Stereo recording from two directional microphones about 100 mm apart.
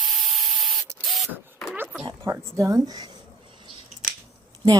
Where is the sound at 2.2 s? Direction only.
30° right (ahead or behind).